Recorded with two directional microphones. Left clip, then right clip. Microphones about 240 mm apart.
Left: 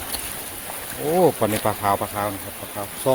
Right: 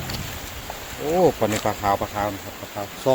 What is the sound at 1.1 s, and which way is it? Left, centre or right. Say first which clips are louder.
Speech: even; centre.